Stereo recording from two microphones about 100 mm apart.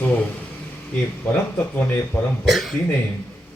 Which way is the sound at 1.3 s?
20° left (ahead or behind).